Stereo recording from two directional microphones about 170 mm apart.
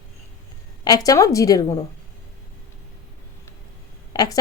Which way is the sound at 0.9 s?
20° left (ahead or behind).